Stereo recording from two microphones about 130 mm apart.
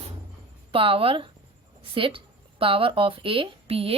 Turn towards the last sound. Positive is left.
turn(degrees=-45)  # may be behind; listen again after turning